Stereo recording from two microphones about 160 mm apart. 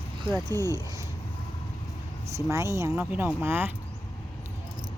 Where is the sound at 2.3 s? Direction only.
20° right (ahead or behind).